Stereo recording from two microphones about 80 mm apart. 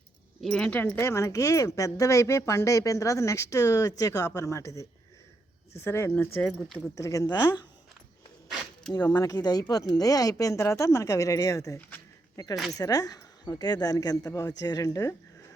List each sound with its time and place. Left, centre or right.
0.4 s speech: centre
0.9 s speech: left
5.7 s speech: left
6.9 s speech: left
8.9 s speech: left